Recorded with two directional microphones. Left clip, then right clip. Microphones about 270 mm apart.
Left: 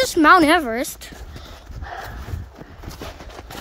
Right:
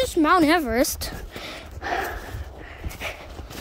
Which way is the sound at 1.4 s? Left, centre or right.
Right.